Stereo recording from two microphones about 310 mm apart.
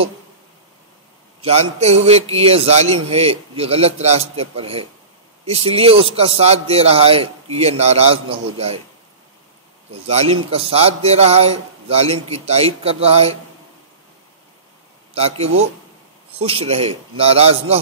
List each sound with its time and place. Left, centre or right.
1.4 s a man's voice: centre
10.0 s a man's voice: centre
15.1 s a man's voice: centre